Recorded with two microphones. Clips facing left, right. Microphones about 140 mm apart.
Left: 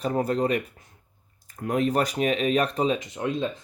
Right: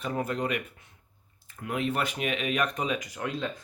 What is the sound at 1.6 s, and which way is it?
Speech, 40° left (ahead or behind).